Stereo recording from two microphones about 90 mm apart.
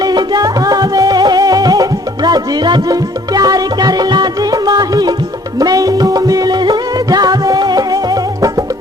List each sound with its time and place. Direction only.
0.0 s music: 50° right (ahead or behind)